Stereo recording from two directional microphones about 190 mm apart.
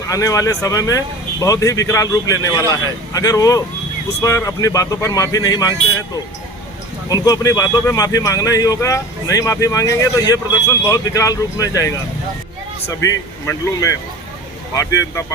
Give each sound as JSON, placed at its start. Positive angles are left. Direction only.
{"t": 0.1, "sound": "a man's voice", "side_deg": 15}
{"t": 7.1, "sound": "a man's voice", "side_deg": 20}